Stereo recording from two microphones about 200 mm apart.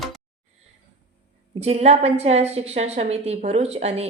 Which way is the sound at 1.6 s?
30° right (ahead or behind).